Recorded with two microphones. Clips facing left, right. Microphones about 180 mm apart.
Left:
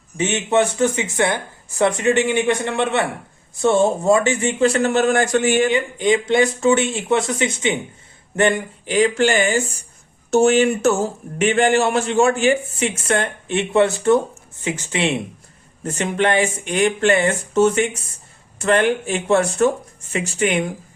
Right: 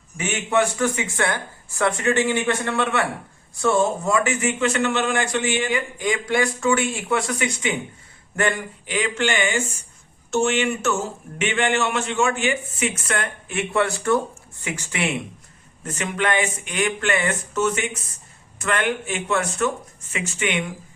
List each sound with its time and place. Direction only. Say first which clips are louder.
0.2 s a man's voice: left 4 dB; 25° left (ahead or behind); by 5.6 s 45° left (ahead or behind)
5.7 s speech: left 6 dB; 25° left (ahead or behind)
9.0 s a man's voice: left 7 dB; 35° left (ahead or behind)